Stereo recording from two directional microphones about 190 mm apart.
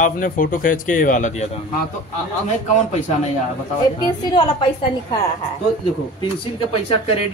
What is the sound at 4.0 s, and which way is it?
Speech, 25° left (ahead or behind).